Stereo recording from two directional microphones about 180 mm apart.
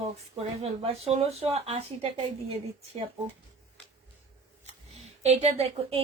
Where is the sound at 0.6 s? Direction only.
35° right (ahead or behind).